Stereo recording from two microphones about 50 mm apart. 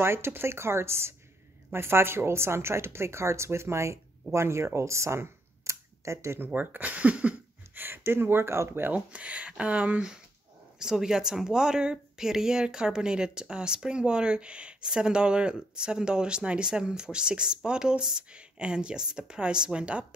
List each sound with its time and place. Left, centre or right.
0.0 s a woman's voice: right
6.4 s speech: right
7.7 s speech: right
8.9 s speech: right
10.8 s speech: centre